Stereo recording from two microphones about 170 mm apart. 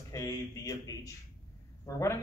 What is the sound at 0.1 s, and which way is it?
A man's voice, 20° left (ahead or behind).